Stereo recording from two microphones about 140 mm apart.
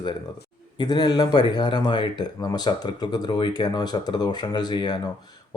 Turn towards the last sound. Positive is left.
turn(degrees=30)  # may be behind; listen again after turning